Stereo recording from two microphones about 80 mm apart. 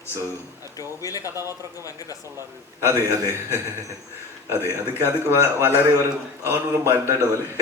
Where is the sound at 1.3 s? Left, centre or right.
Right.